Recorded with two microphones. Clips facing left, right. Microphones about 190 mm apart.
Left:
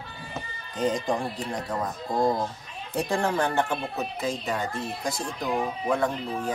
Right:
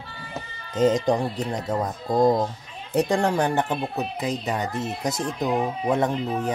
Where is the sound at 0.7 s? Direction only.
20° right (ahead or behind).